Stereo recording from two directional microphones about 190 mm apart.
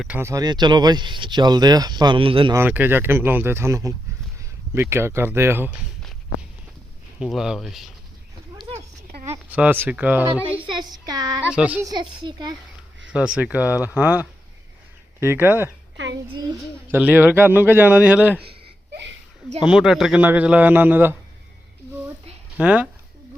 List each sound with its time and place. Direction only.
0.0 s speech: 10° right (ahead or behind); by 2.6 s 25° right (ahead or behind)
2.6 s a man's voice: 10° right (ahead or behind)
7.2 s speech: centre (ahead or behind)
9.2 s speech: 10° right (ahead or behind)
10.7 s a sound: 20° right (ahead or behind)
11.5 s a man's voice: 5° right (ahead or behind)
11.9 s speech: 20° right (ahead or behind)
13.1 s a man's voice: 5° right (ahead or behind)
16.9 s a man's voice: 10° right (ahead or behind)
19.6 s a man's voice: centre (ahead or behind)
22.5 s a man's voice: 5° right (ahead or behind)